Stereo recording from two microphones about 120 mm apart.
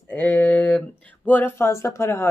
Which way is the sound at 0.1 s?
15° left (ahead or behind).